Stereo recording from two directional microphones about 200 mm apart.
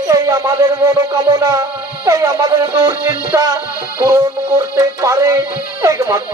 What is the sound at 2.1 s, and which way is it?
Speech, 15° right (ahead or behind).